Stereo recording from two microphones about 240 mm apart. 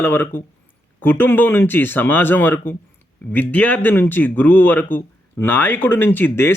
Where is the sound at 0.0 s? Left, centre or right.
Centre.